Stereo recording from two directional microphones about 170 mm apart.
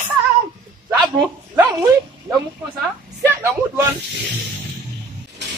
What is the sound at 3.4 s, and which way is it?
Speech, 15° right (ahead or behind).